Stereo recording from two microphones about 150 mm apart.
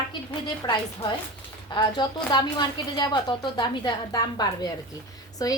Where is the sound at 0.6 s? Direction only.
25° left (ahead or behind).